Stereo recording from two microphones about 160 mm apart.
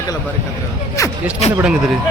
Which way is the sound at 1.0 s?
20° left (ahead or behind).